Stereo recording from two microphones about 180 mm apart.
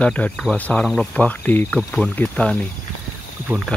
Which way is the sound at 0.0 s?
10° left (ahead or behind).